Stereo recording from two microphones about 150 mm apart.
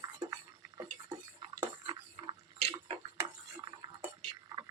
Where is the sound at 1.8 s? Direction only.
35° right (ahead or behind).